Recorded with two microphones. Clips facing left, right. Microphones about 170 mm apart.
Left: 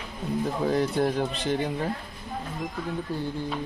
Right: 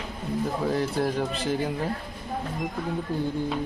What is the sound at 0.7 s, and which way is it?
Speech, centre (ahead or behind).